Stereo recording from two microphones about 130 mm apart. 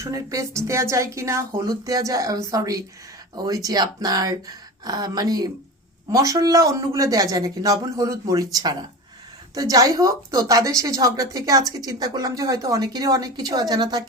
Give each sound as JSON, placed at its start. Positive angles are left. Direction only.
{"t": 0.0, "sound": "a woman's voice", "side_deg": -25}